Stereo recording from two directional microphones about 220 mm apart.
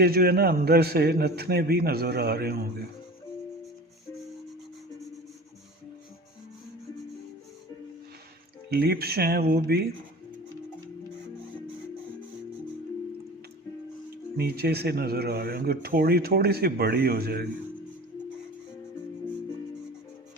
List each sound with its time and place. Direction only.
0.0 s speech: 45° right (ahead or behind)
8.7 s speech: 45° right (ahead or behind)
14.3 s speech: 45° right (ahead or behind)